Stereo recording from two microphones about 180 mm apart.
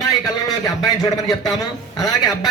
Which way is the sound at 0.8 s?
20° left (ahead or behind).